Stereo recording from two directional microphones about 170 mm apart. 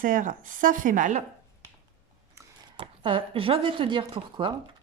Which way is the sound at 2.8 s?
30° right (ahead or behind).